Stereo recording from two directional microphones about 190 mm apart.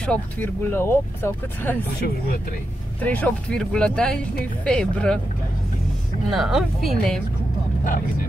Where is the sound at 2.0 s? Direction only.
50° left (ahead or behind).